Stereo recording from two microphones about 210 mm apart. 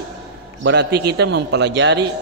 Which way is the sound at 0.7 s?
50° right (ahead or behind).